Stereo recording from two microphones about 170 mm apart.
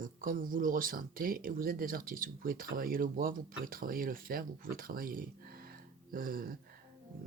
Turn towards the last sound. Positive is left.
turn(degrees=-55)  # may be behind; listen again after turning